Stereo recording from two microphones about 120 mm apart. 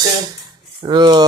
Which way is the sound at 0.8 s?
40° right (ahead or behind).